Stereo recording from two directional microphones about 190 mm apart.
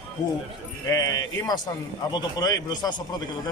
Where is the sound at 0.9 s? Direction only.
20° left (ahead or behind).